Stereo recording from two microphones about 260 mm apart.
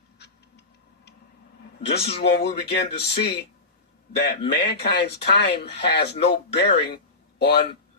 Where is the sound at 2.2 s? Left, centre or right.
Left.